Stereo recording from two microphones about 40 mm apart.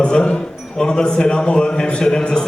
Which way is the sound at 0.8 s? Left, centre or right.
Left.